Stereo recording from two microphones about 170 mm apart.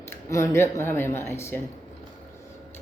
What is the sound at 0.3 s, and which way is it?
A man's voice, 20° left (ahead or behind).